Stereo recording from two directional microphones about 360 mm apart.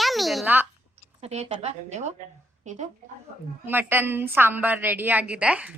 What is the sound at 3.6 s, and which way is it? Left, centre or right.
Speech, centre.